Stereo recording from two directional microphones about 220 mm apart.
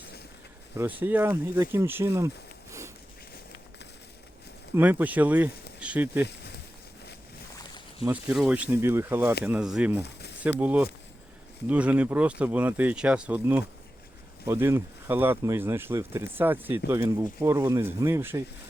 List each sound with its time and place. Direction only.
0.8 s speech: 10° right (ahead or behind)
4.7 s speech: 5° right (ahead or behind)
6.2 s a sound: 50° left (ahead or behind)
8.1 s speech: 5° right (ahead or behind)
10.0 s a sound: 50° left (ahead or behind)
10.6 s speech: 5° right (ahead or behind)